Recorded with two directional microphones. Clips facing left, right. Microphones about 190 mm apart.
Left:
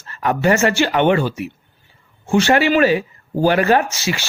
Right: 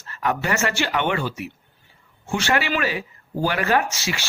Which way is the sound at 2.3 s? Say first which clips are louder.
Left 8 dB; 30° left (ahead or behind).